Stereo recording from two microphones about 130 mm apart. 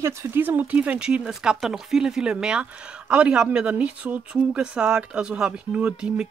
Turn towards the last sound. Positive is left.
turn(degrees=-5)  # may be behind; listen again after turning